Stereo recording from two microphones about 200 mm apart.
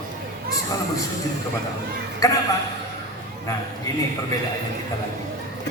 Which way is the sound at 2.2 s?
15° left (ahead or behind).